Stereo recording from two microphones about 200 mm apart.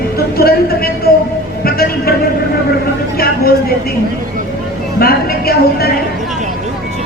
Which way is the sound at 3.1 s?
50° left (ahead or behind).